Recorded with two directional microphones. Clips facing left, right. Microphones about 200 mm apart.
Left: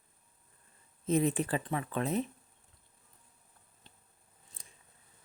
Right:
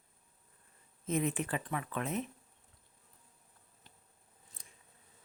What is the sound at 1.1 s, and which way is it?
Speech, 35° left (ahead or behind).